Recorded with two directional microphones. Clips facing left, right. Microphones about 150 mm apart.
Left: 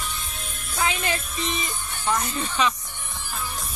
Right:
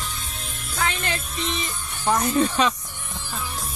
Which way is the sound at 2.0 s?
40° right (ahead or behind).